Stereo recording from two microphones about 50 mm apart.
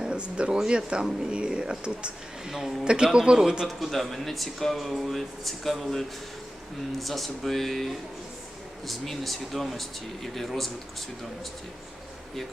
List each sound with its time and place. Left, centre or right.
0.0 s a sound: right
0.7 s speech: centre
2.5 s speech: centre
3.7 s speech: centre